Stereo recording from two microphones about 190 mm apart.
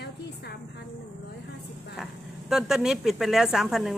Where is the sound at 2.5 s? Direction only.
Centre (ahead or behind).